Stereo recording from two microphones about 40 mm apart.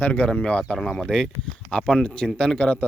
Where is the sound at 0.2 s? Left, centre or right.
Left.